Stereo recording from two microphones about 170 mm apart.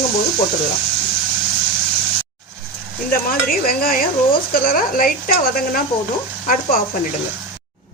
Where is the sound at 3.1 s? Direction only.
60° left (ahead or behind).